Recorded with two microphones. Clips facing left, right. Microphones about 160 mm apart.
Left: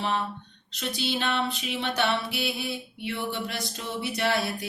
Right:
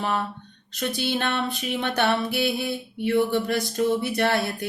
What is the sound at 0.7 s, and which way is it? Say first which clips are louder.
Music: right 4 dB; 50° right (ahead or behind).